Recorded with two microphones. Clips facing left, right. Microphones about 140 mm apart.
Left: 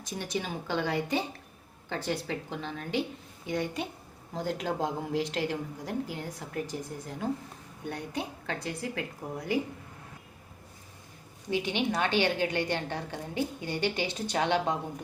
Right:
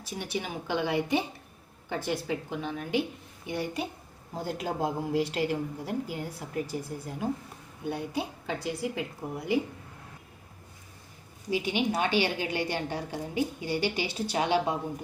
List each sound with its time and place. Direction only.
0.0 s a woman's voice: 10° right (ahead or behind)
11.5 s a woman's voice: 10° right (ahead or behind)